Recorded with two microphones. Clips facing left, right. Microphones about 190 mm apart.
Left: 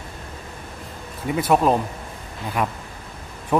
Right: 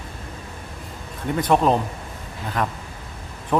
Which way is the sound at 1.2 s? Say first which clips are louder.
Even; 5° left (ahead or behind).